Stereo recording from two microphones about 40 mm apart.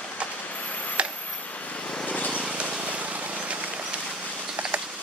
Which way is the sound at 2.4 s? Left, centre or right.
Right.